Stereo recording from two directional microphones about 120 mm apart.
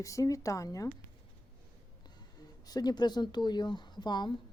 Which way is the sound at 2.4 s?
35° left (ahead or behind).